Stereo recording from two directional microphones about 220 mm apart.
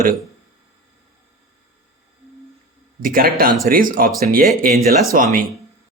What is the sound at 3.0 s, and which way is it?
Speech, 40° right (ahead or behind).